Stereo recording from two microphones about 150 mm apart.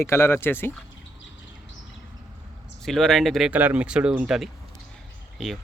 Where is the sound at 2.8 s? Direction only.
5° left (ahead or behind).